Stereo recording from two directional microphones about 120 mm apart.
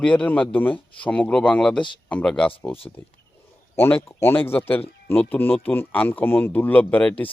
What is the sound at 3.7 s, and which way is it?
Speech, 20° left (ahead or behind).